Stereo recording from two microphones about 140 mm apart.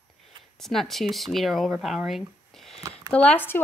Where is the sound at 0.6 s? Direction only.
Centre (ahead or behind).